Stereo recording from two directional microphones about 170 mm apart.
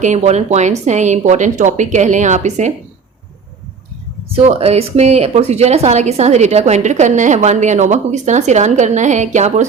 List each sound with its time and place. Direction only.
0.0 s speech: 40° right (ahead or behind)
4.3 s speech: 35° right (ahead or behind)